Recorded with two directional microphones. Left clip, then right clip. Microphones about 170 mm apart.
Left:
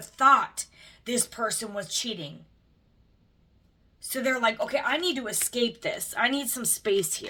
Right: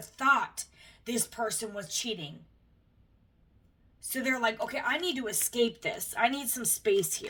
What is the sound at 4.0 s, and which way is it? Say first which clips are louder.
Speech: left 4 dB; 40° left (ahead or behind).